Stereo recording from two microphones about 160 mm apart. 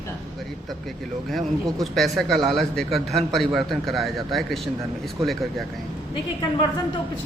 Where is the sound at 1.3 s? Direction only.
Centre (ahead or behind).